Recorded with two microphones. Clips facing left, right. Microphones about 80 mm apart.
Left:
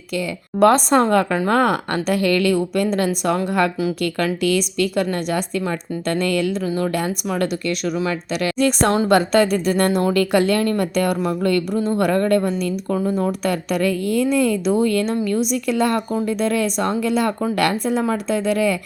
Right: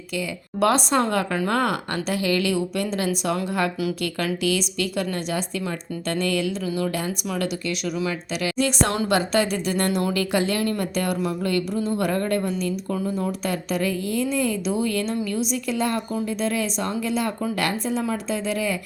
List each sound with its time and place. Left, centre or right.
0.1 s speech: left
6.6 s speech: left